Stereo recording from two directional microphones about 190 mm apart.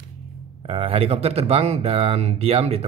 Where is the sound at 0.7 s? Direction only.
30° right (ahead or behind).